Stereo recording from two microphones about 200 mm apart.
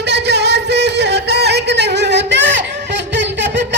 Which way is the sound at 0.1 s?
55° right (ahead or behind).